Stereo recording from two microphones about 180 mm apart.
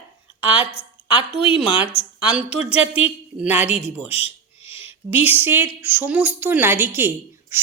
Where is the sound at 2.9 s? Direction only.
10° right (ahead or behind).